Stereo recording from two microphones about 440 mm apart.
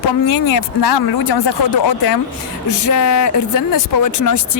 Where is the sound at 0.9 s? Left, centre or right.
Left.